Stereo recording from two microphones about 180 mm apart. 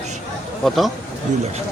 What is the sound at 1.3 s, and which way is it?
Speech, 45° right (ahead or behind).